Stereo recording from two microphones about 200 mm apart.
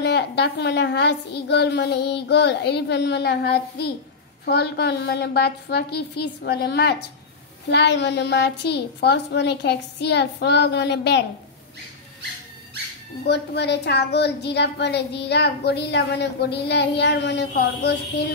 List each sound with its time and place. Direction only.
0.0 s a woman's voice: 60° left (ahead or behind)
13.3 s a woman's voice: 55° left (ahead or behind)